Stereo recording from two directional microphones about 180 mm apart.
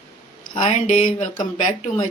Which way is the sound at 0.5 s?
45° left (ahead or behind).